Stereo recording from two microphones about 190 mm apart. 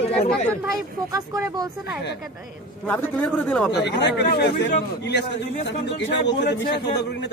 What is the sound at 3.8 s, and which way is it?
A man's voice, 65° left (ahead or behind).